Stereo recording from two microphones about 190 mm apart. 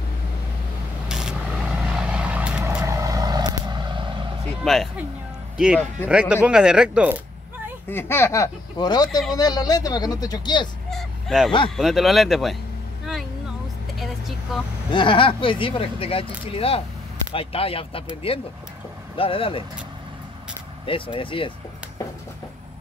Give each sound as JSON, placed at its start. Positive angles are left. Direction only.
{"t": 1.0, "sound": "vehicle", "side_deg": -5}
{"t": 4.6, "sound": "speech", "side_deg": 0}
{"t": 6.0, "sound": "speech", "side_deg": -5}
{"t": 7.9, "sound": "speech", "side_deg": 10}
{"t": 10.9, "sound": "dog", "side_deg": 0}
{"t": 11.7, "sound": "speech", "side_deg": 0}
{"t": 13.9, "sound": "vehicle", "side_deg": 0}
{"t": 14.9, "sound": "speech", "side_deg": 25}
{"t": 20.8, "sound": "speech", "side_deg": 25}